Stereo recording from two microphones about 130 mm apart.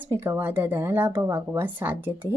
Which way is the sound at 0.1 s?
15° right (ahead or behind).